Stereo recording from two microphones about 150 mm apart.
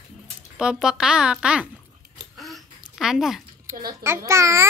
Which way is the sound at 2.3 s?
Centre (ahead or behind).